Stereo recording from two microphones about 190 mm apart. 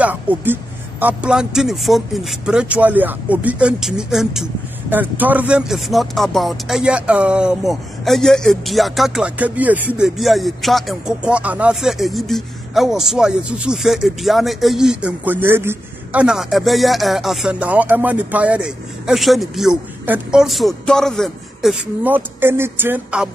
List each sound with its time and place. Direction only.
0.0 s speech: 10° right (ahead or behind)